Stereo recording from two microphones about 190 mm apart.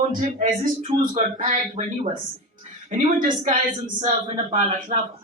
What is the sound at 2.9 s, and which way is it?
Speech, 40° right (ahead or behind).